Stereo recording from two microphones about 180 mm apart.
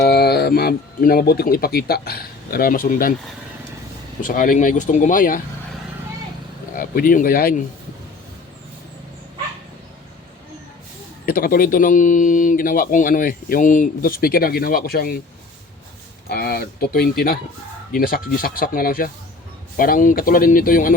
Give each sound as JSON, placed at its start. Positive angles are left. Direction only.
{"t": 0.0, "sound": "speech", "side_deg": 65}
{"t": 4.2, "sound": "speech", "side_deg": 50}
{"t": 6.7, "sound": "speech", "side_deg": 50}
{"t": 11.3, "sound": "speech", "side_deg": 55}
{"t": 16.3, "sound": "speech", "side_deg": 60}